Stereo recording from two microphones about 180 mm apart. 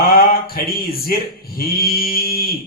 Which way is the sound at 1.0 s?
55° left (ahead or behind).